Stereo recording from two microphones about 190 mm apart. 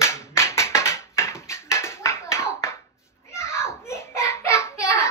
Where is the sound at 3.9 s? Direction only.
15° left (ahead or behind).